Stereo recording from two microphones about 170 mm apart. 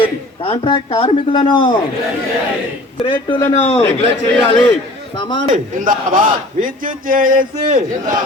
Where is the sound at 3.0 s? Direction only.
30° left (ahead or behind).